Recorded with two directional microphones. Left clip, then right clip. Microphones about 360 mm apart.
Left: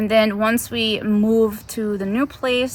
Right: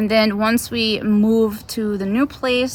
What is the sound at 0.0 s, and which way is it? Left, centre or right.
Speech, centre.